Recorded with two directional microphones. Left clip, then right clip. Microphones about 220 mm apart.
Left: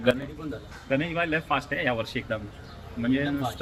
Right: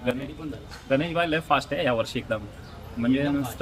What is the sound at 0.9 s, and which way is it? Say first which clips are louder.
A man's voice: right 2 dB; 15° right (ahead or behind).